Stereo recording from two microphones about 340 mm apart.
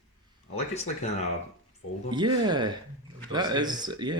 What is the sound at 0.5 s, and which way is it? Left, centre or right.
Speech, centre.